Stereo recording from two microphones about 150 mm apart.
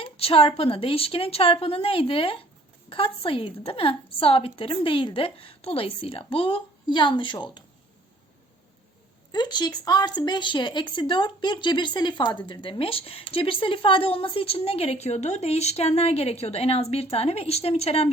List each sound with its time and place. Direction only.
0.0 s a woman's voice: 40° left (ahead or behind)
9.3 s a woman's voice: 30° left (ahead or behind)